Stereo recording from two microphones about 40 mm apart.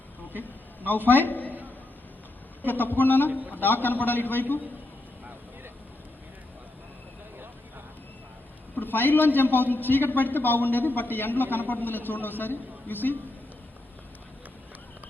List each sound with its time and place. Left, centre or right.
1.0 s a man's voice: left
2.6 s a man's voice: left
8.7 s a man's voice: left